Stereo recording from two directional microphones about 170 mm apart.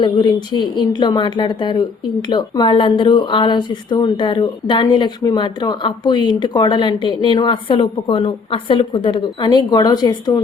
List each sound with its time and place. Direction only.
0.0 s speech: 25° left (ahead or behind)